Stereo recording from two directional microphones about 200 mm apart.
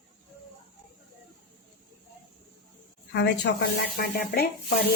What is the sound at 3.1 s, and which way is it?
Speech, 60° left (ahead or behind).